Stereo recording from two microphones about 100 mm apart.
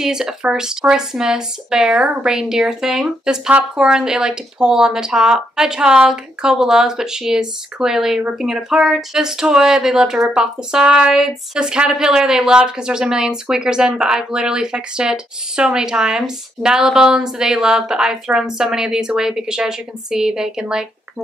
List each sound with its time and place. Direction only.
0.0 s speech: 5° right (ahead or behind)